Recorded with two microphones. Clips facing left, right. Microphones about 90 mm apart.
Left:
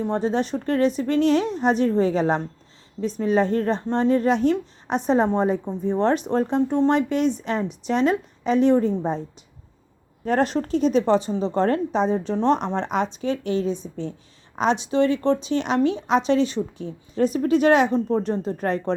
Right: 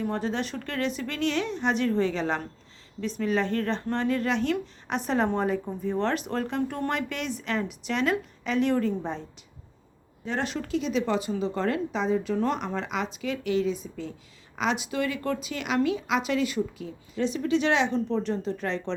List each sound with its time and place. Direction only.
0.0 s speech: 30° left (ahead or behind)
5.1 s speech: 25° left (ahead or behind)
7.1 s speech: 35° left (ahead or behind)
10.2 s speech: 45° left (ahead or behind)